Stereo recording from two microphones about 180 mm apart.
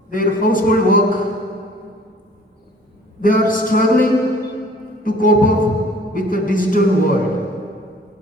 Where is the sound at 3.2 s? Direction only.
50° left (ahead or behind).